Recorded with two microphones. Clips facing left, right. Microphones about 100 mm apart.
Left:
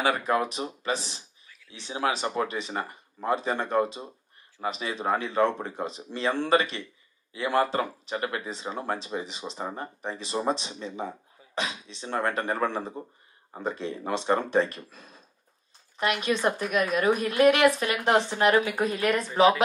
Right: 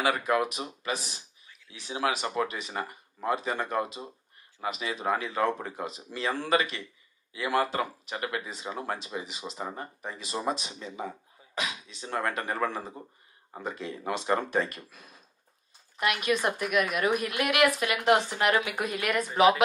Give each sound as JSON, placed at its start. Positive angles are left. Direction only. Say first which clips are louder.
{"t": 0.0, "sound": "speech", "louder": "left 1 dB", "side_deg": 35}